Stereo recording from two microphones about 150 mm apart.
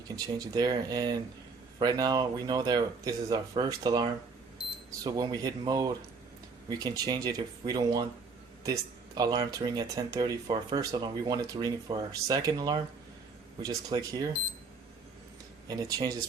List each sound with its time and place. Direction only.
0.3 s speech: 25° right (ahead or behind)
15.6 s speech: 25° right (ahead or behind)